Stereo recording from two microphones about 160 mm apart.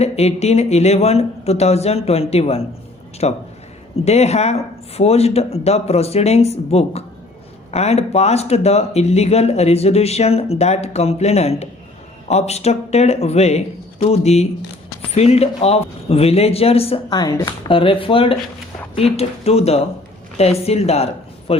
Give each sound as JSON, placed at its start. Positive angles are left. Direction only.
{"t": 0.0, "sound": "speech", "side_deg": 40}
{"t": 17.1, "sound": "speech", "side_deg": 25}